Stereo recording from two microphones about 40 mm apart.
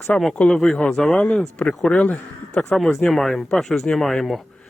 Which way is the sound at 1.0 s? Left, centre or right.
Left.